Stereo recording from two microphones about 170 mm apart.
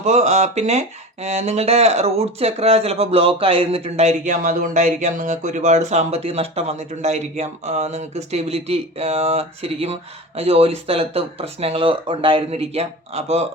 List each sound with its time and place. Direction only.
0.0 s speech: 40° right (ahead or behind)